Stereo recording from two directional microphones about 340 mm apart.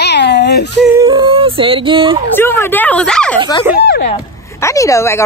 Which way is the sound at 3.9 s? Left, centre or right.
Left.